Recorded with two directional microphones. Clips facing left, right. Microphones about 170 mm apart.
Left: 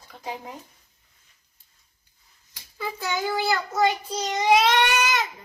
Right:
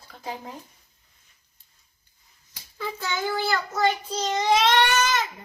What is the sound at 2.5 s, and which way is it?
A child's voice, 5° left (ahead or behind).